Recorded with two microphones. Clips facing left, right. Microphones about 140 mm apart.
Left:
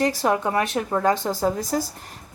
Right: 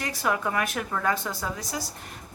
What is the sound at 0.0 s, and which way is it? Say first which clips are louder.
A woman's voice: left 6 dB; 35° left (ahead or behind).